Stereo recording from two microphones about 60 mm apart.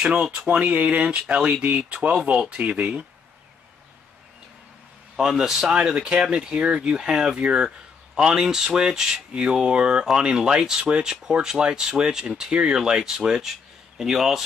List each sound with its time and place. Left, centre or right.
0.0 s speech: centre
0.3 s speech: right
5.1 s speech: centre